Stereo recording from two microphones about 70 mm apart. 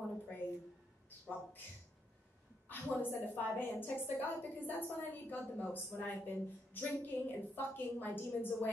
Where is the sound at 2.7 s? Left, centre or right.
Left.